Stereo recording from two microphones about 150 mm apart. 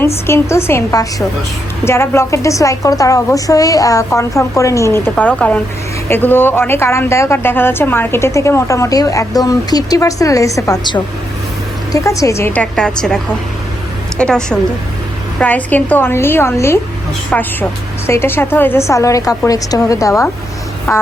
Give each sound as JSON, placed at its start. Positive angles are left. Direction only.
{"t": 0.3, "sound": "a woman's voice", "side_deg": 15}
{"t": 12.7, "sound": "a woman's voice", "side_deg": 5}
{"t": 14.2, "sound": "a woman's voice", "side_deg": 5}